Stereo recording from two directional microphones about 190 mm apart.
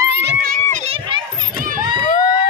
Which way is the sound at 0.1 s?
65° right (ahead or behind).